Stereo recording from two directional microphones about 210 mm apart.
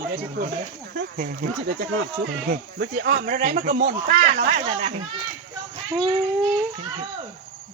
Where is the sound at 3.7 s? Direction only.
45° right (ahead or behind).